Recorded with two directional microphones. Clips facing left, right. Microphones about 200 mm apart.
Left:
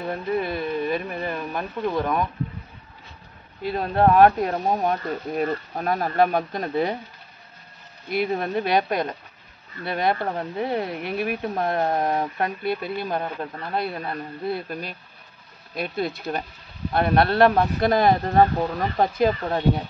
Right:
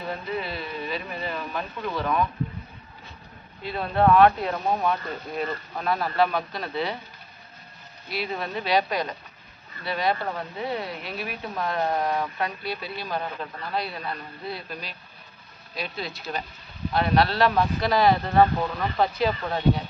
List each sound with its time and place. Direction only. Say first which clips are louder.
0.1 s speech: left 6 dB; 50° left (ahead or behind)
3.6 s speech: left 2 dB; 40° left (ahead or behind)
8.1 s speech: left 6 dB; 50° left (ahead or behind)